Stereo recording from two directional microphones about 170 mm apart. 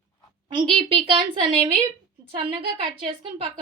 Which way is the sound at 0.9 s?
30° right (ahead or behind).